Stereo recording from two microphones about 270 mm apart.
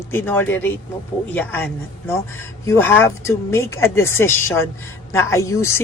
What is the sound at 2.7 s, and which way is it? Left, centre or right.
Speech, centre.